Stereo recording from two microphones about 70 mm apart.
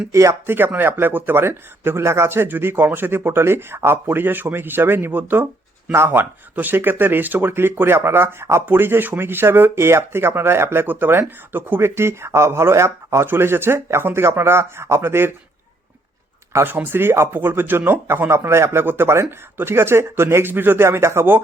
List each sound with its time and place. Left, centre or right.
0.1 s speech: right
0.5 s speech: right
13.2 s speech: right
16.6 s speech: right
18.3 s speech: right